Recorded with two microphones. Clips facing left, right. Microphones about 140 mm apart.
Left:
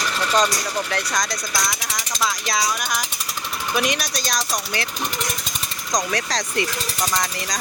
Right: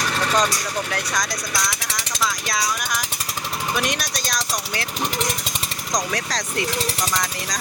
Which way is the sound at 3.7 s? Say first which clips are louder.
Left 5 dB; centre (ahead or behind).